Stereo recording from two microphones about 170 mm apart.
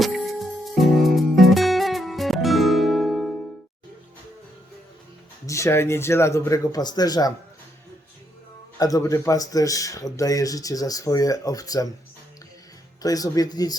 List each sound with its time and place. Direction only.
0.0 s music: centre (ahead or behind)
5.5 s speech: 15° left (ahead or behind)
8.8 s speech: 20° left (ahead or behind)
13.0 s speech: 20° left (ahead or behind)